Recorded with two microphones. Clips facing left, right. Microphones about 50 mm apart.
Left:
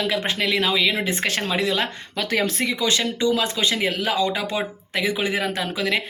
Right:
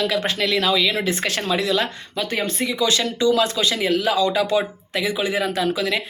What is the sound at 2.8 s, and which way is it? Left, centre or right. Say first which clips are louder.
Speech: right 3 dB; left.